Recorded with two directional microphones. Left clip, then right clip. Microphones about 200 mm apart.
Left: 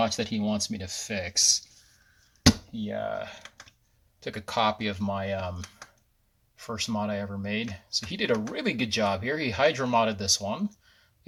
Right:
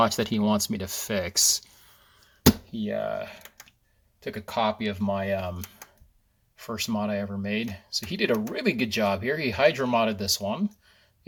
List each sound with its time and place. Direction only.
0.0 s speech: 35° right (ahead or behind)
2.8 s speech: 20° right (ahead or behind)
6.6 s speech: 10° right (ahead or behind)